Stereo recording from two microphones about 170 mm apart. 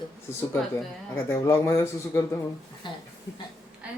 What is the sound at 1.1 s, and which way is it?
A man's voice, 15° left (ahead or behind).